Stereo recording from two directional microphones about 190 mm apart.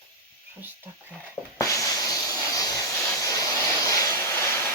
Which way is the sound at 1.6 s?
15° left (ahead or behind).